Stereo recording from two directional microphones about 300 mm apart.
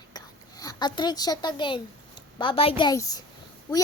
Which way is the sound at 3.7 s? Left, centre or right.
Centre.